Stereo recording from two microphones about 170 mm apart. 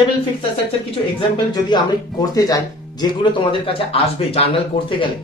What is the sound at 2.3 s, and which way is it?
Speech, 20° left (ahead or behind).